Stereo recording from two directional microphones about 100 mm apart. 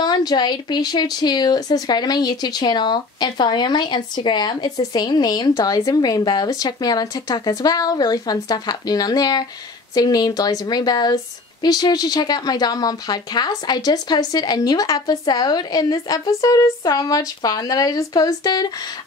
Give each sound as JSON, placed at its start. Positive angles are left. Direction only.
{"t": 0.0, "sound": "speech", "side_deg": 45}